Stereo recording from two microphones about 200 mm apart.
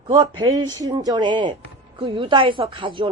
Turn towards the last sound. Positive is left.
turn(degrees=-25)  # may be behind; listen again after turning